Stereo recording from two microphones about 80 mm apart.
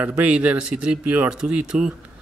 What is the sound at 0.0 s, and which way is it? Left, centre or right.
Speech, centre.